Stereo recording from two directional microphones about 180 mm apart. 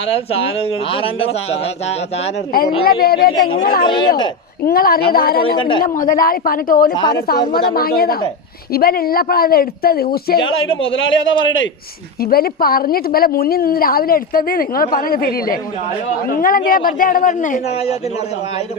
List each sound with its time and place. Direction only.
0.1 s speech: 30° left (ahead or behind)
2.5 s a woman's voice: 55° left (ahead or behind)
3.8 s speech: 25° left (ahead or behind)
4.6 s a woman's voice: 55° left (ahead or behind)
5.5 s speech: 25° left (ahead or behind)
5.8 s a man's voice: 50° left (ahead or behind)
6.9 s speech: 25° left (ahead or behind)
7.5 s a woman's voice: 55° left (ahead or behind)
10.9 s a man's voice: 90° left
12.2 s a woman's voice: 55° left (ahead or behind)